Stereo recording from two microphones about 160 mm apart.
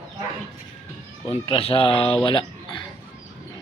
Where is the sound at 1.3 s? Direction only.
35° left (ahead or behind).